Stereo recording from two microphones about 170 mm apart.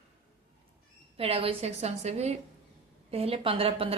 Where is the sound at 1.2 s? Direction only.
35° right (ahead or behind).